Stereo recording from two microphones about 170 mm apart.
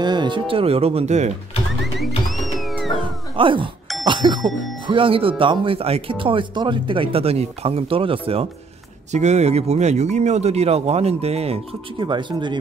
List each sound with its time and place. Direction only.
0.0 s speech: 25° right (ahead or behind); by 1.3 s 40° right (ahead or behind)
2.0 s music: centre (ahead or behind)
3.3 s speech: 30° right (ahead or behind)